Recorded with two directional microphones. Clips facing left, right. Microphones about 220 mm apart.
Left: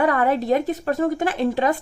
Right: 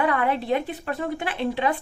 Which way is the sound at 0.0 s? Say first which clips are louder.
Left 4 dB; 45° left (ahead or behind).